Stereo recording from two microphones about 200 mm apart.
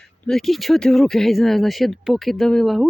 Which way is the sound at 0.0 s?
Centre (ahead or behind).